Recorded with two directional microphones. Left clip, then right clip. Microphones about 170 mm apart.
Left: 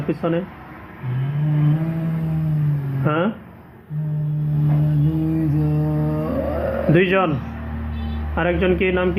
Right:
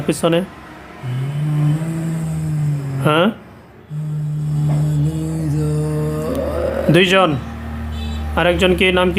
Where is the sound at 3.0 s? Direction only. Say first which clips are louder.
Right 6 dB; 45° right (ahead or behind).